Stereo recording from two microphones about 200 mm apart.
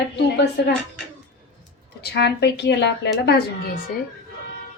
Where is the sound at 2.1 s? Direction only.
60° left (ahead or behind).